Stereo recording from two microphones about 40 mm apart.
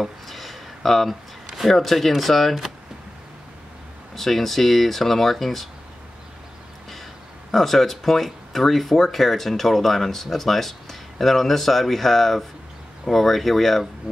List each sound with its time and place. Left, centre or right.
0.0 s a sound: centre
4.1 s speech: centre
7.5 s speech: centre
14.1 s music: right